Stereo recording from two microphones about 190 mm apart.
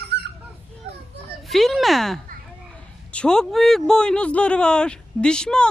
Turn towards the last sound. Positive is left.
turn(degrees=5)  # may be behind; listen again after turning